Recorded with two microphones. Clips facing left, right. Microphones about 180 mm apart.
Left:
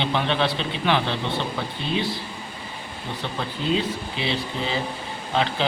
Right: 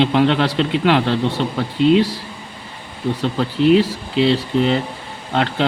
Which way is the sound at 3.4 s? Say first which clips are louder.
Right 11 dB; 85° right.